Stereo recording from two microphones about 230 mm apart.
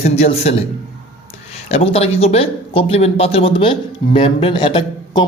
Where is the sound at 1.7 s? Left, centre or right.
Left.